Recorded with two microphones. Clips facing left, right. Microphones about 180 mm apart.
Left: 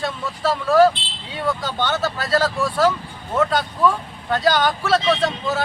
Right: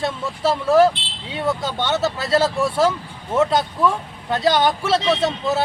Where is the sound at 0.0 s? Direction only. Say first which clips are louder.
Right 2 dB; 25° right (ahead or behind).